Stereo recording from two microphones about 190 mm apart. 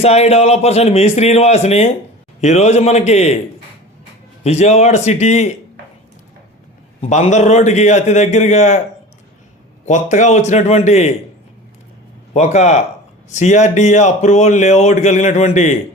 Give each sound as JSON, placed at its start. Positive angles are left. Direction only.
{"t": 0.0, "sound": "speech", "side_deg": 35}
{"t": 4.4, "sound": "speech", "side_deg": 35}
{"t": 7.0, "sound": "speech", "side_deg": 40}
{"t": 9.8, "sound": "speech", "side_deg": 40}
{"t": 12.3, "sound": "speech", "side_deg": 35}